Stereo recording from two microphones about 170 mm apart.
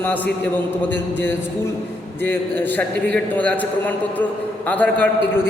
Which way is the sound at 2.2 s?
10° left (ahead or behind).